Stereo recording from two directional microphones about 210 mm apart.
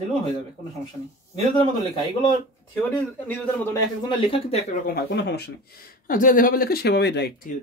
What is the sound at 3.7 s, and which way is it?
Speech, 25° left (ahead or behind).